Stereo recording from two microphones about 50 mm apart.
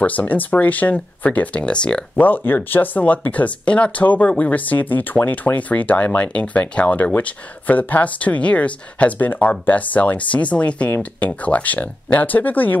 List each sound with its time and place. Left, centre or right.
0.0 s speech: left
2.1 s speech: left